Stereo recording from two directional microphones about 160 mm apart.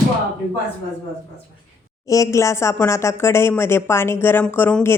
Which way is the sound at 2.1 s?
20° left (ahead or behind).